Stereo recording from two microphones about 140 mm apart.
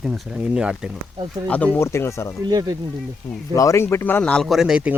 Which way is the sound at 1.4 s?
10° left (ahead or behind).